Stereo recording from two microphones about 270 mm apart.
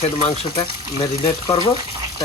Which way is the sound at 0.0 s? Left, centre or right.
Left.